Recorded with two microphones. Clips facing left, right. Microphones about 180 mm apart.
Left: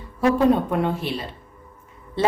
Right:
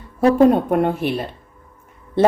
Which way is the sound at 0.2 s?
45° right (ahead or behind).